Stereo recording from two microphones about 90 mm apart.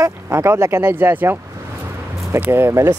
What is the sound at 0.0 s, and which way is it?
Speech, 30° right (ahead or behind).